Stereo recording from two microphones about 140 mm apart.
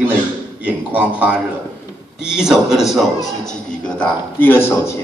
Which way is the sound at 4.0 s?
15° left (ahead or behind).